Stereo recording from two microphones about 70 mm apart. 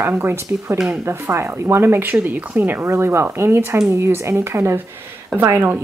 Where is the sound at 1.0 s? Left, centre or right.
Right.